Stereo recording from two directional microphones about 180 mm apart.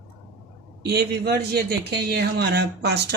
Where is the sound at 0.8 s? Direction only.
65° right (ahead or behind).